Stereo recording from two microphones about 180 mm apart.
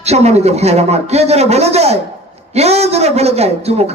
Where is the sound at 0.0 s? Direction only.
35° right (ahead or behind).